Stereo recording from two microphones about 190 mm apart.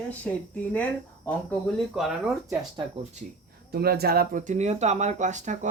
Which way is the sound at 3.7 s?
55° right (ahead or behind).